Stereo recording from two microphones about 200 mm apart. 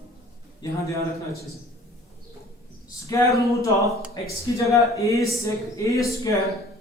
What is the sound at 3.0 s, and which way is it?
Speech, 15° left (ahead or behind).